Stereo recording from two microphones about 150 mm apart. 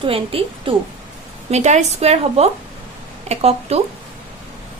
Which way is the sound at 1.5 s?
50° right (ahead or behind).